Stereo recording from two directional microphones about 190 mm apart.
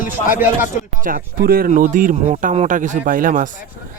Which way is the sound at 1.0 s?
50° right (ahead or behind).